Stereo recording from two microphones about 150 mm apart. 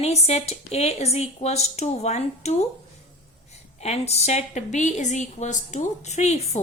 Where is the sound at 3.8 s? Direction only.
45° left (ahead or behind).